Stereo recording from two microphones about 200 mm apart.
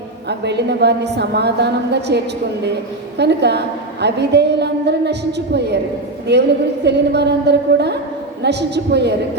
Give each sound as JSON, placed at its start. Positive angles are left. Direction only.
{"t": 0.3, "sound": "a woman's voice", "side_deg": -55}